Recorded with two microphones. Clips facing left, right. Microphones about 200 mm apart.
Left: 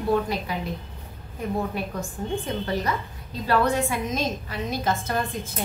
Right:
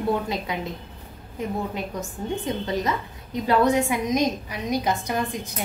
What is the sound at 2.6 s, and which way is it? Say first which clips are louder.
A woman's voice: right 1 dB; 20° right (ahead or behind).